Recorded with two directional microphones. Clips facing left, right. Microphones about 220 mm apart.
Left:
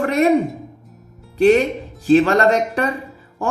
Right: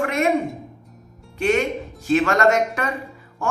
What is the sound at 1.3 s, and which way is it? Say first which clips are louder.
Speech: left 7 dB; 35° left (ahead or behind).